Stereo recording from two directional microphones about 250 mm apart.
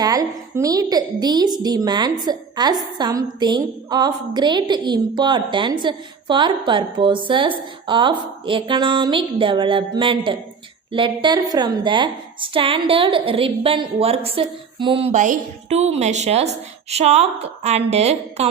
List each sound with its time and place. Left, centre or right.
0.0 s a woman's voice: centre